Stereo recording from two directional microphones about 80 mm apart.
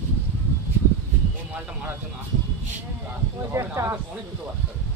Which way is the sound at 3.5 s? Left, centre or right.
Right.